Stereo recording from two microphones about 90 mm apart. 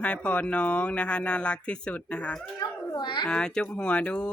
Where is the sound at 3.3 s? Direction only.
10° left (ahead or behind).